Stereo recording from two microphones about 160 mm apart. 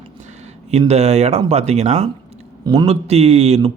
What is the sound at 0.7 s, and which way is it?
Speech, 40° right (ahead or behind).